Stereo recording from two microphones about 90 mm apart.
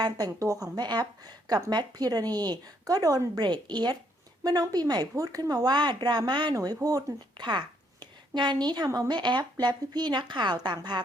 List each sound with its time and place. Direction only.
0.3 s speech: 40° right (ahead or behind)